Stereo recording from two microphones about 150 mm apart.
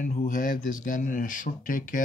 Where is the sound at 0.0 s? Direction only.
55° left (ahead or behind).